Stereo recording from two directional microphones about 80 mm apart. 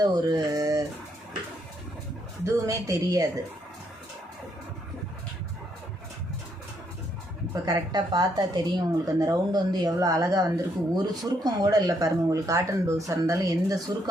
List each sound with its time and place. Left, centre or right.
0.0 s speech: right
2.4 s speech: right
7.5 s a woman's voice: right
9.0 s speech: right